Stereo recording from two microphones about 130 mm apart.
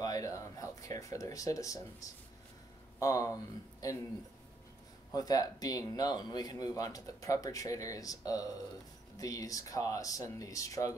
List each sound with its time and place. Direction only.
0.0 s speech: 25° left (ahead or behind)
5.1 s speech: 30° left (ahead or behind)